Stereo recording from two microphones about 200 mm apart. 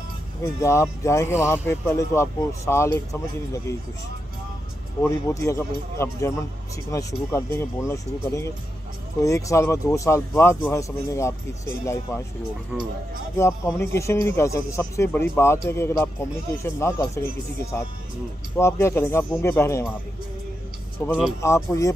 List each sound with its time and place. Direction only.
0.4 s speech: 15° left (ahead or behind)
5.0 s speech: 15° left (ahead or behind)
13.4 s speech: 15° left (ahead or behind)
21.0 s speech: 10° left (ahead or behind)